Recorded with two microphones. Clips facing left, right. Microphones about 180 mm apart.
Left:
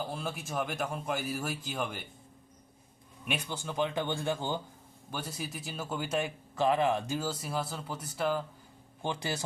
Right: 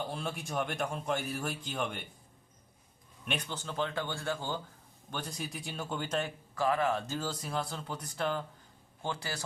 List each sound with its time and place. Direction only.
0.0 s a man's voice: centre (ahead or behind)
3.2 s speech: 10° left (ahead or behind)
5.1 s speech: 5° left (ahead or behind)
9.0 s speech: 15° left (ahead or behind)